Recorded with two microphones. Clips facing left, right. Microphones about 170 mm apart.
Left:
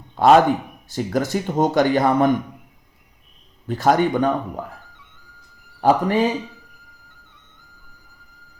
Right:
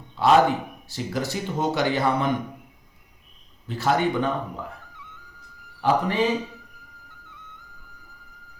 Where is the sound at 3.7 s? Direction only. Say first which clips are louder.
Left 5 dB; 45° left (ahead or behind).